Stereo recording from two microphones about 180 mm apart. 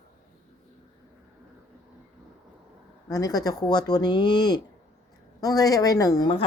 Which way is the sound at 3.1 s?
20° left (ahead or behind).